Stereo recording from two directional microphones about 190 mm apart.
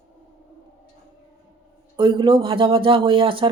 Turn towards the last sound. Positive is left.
turn(degrees=-25)  # may be behind; listen again after turning